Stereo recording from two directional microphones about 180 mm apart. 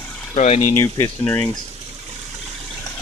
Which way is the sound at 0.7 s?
15° left (ahead or behind).